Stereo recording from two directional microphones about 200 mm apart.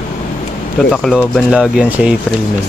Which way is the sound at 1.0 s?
5° left (ahead or behind).